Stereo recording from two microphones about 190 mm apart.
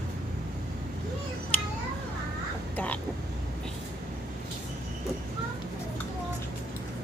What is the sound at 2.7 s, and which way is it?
Vehicle, 10° left (ahead or behind).